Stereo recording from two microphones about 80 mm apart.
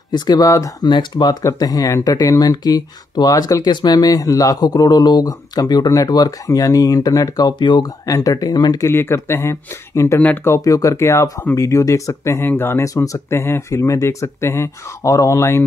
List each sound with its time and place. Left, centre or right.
0.1 s speech: left
0.8 s speech: left
1.6 s speech: left
8.1 s speech: left
8.8 s speech: left
12.8 s speech: left